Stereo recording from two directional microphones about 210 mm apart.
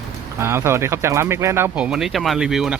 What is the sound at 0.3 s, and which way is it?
Speech, 10° right (ahead or behind).